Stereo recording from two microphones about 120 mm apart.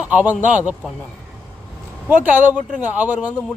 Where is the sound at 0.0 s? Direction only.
10° right (ahead or behind).